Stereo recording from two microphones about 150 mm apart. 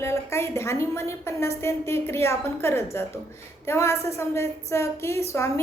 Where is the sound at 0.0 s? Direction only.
20° left (ahead or behind).